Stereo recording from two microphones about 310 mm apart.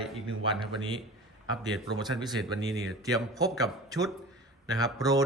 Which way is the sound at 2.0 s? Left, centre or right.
Centre.